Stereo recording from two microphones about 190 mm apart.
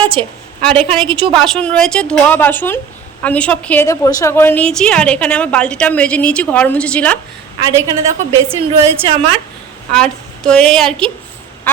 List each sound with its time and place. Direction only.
0.0 s a sound: 25° right (ahead or behind)
0.6 s a woman's voice: 5° left (ahead or behind)
1.0 s a woman's voice: 25° right (ahead or behind)
1.4 s a woman's voice: 5° left (ahead or behind)
7.6 s a woman's voice: 20° right (ahead or behind)
9.9 s a woman's voice: 5° left (ahead or behind)